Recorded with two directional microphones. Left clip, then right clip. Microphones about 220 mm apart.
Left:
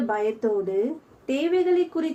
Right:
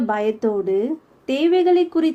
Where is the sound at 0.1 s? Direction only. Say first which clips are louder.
Right 3 dB; 50° right (ahead or behind).